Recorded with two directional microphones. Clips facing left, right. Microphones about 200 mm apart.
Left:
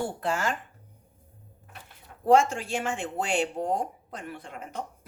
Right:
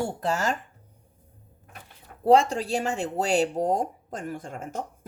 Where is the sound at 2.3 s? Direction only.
35° right (ahead or behind).